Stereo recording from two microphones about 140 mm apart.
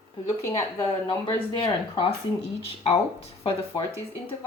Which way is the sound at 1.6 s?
35° left (ahead or behind).